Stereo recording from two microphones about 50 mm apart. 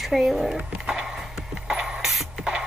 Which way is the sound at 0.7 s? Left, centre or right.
Centre.